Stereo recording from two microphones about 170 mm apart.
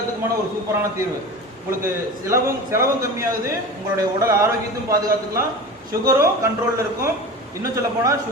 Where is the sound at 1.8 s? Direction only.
15° right (ahead or behind).